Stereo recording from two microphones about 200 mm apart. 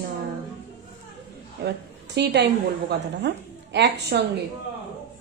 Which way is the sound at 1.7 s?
60° right (ahead or behind).